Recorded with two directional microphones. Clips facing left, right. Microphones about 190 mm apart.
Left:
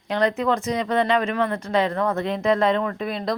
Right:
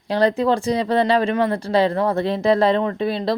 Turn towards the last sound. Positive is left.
turn(degrees=-30)  # may be behind; listen again after turning